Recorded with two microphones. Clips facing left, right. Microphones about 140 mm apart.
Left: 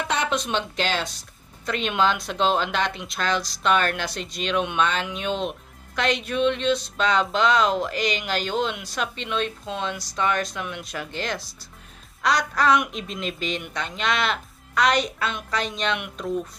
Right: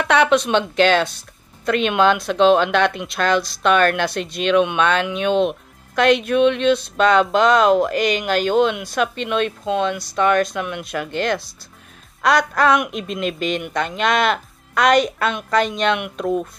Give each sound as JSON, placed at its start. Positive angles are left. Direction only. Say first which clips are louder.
{"t": 0.0, "sound": "speech", "louder": "right 9 dB", "side_deg": -70}